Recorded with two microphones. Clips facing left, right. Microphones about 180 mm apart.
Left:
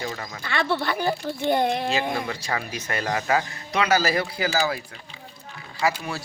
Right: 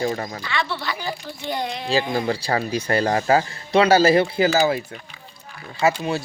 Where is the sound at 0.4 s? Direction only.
50° left (ahead or behind).